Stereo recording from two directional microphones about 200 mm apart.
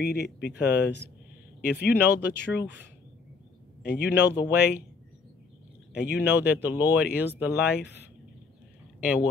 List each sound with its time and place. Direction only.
0.0 s speech: 55° left (ahead or behind)
5.9 s speech: 55° left (ahead or behind)
6.4 s speech: 10° right (ahead or behind)
9.0 s speech: 5° right (ahead or behind)